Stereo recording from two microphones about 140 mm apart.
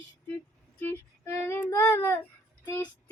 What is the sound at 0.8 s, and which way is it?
Child singing, 15° left (ahead or behind).